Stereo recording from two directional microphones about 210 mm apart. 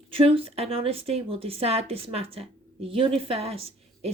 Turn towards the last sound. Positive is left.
turn(degrees=-30)  # may be behind; listen again after turning